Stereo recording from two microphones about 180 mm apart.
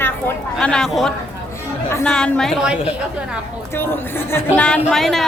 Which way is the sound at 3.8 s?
10° left (ahead or behind).